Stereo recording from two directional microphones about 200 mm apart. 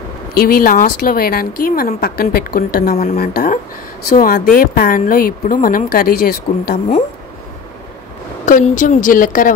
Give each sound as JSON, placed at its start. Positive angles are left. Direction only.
{"t": 0.3, "sound": "speech", "side_deg": 50}
{"t": 8.5, "sound": "a woman's voice", "side_deg": 40}